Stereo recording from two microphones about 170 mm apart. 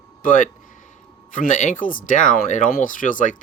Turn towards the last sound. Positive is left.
turn(degrees=50)  # may be behind; listen again after turning